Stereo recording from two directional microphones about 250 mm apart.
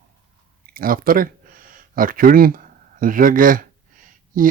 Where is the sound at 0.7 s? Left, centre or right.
Right.